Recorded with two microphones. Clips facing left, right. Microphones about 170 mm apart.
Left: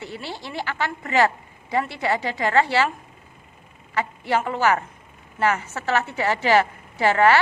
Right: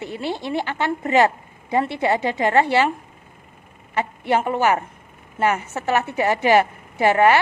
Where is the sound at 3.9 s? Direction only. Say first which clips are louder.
Right 3 dB; 20° right (ahead or behind).